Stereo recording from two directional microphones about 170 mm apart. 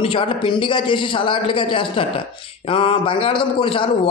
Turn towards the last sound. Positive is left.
turn(degrees=30)  # may be behind; listen again after turning